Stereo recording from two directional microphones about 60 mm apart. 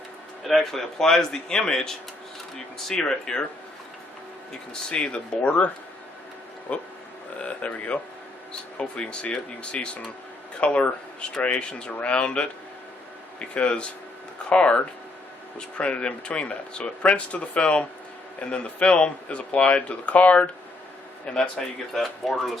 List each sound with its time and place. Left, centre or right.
0.4 s a man's voice: centre
4.7 s a man's voice: centre
13.5 s a man's voice: centre
21.9 s speech: centre